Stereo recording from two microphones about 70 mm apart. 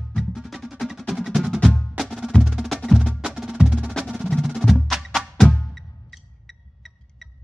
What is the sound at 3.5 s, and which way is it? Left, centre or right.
Music, centre.